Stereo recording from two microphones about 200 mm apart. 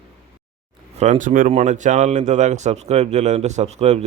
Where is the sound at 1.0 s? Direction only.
40° right (ahead or behind).